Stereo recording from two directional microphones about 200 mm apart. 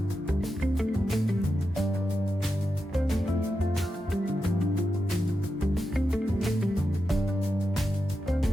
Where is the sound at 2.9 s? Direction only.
Centre (ahead or behind).